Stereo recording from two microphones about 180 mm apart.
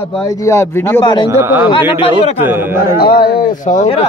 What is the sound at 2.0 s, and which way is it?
Speech, 30° left (ahead or behind).